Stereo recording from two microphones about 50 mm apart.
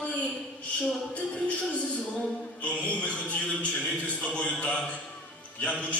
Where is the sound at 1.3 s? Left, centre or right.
Left.